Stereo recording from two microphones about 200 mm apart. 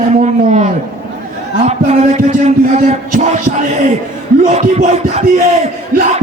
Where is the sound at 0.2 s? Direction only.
35° right (ahead or behind).